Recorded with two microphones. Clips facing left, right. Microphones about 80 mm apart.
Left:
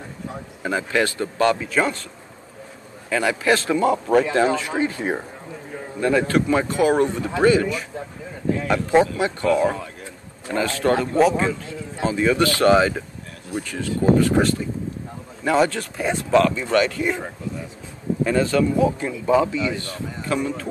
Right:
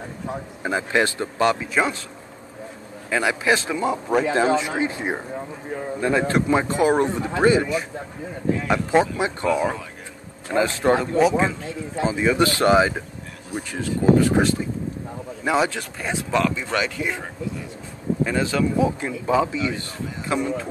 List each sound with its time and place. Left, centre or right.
0.6 s a man's voice: centre
3.1 s a man's voice: centre
4.3 s a man's voice: centre
9.0 s speech: centre
9.5 s a man's voice: centre
18.2 s a man's voice: centre